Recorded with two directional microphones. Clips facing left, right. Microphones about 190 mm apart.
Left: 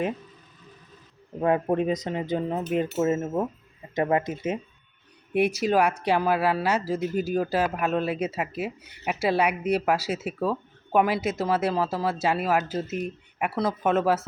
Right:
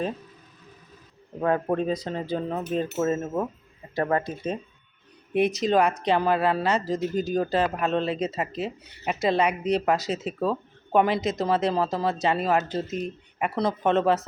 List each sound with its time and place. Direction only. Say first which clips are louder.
1.4 s speech: left 1 dB; 15° left (ahead or behind)